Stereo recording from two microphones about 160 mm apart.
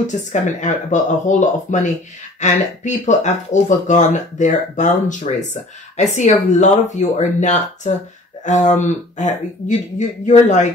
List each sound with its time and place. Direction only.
0.0 s speech: 50° left (ahead or behind)